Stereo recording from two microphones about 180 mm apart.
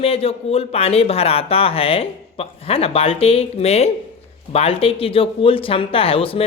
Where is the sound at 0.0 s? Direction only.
35° left (ahead or behind).